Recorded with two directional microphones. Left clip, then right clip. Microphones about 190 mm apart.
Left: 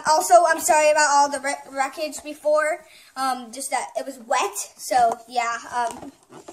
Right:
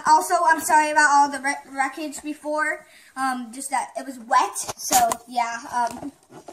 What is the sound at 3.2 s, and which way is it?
A woman's voice, 45° left (ahead or behind).